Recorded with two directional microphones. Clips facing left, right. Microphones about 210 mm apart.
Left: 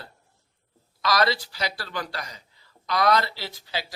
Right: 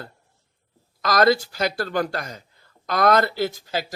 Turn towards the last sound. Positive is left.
turn(degrees=-45)  # may be behind; listen again after turning